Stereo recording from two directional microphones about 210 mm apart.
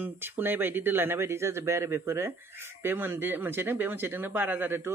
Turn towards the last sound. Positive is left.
turn(degrees=-10)  # may be behind; listen again after turning